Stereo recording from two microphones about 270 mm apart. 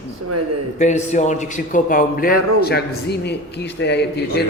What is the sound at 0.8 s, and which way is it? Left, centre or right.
A man's voice, left.